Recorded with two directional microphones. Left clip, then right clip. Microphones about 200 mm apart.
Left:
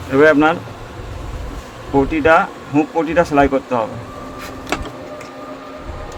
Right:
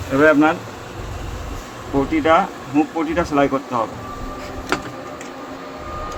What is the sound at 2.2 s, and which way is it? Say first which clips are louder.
Speech: left 3 dB; 45° left (ahead or behind).